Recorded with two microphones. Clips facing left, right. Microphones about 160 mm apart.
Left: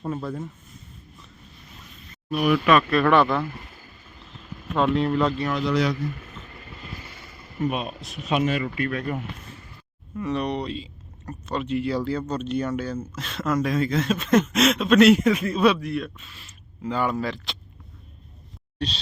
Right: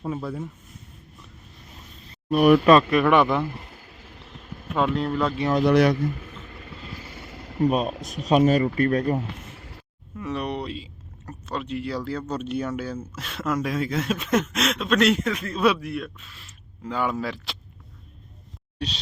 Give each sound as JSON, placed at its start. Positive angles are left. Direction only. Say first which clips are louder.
{"t": 0.0, "sound": "speech", "louder": "even", "side_deg": -5}
{"t": 2.3, "sound": "speech", "louder": "right 5 dB", "side_deg": -45}
{"t": 2.9, "sound": "speech", "louder": "even", "side_deg": -15}
{"t": 4.7, "sound": "speech", "louder": "left 2 dB", "side_deg": -5}
{"t": 5.5, "sound": "a man's voice", "louder": "right 8 dB", "side_deg": -60}
{"t": 7.6, "sound": "speech", "louder": "right 5 dB", "side_deg": -40}
{"t": 9.6, "sound": "a sound", "louder": "right 3 dB", "side_deg": -85}
{"t": 10.2, "sound": "speech", "louder": "left 3 dB", "side_deg": -5}
{"t": 18.8, "sound": "speech", "louder": "left 2 dB", "side_deg": -10}